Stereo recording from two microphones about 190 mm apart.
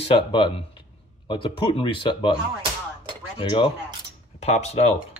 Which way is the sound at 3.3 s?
25° left (ahead or behind).